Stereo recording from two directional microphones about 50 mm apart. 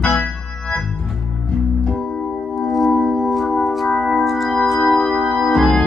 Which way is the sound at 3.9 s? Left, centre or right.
Centre.